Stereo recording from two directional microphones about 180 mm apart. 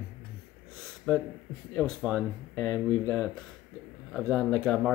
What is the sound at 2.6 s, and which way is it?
Speech, 15° left (ahead or behind).